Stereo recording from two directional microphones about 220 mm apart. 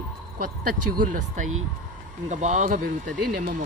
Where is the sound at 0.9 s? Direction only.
35° right (ahead or behind).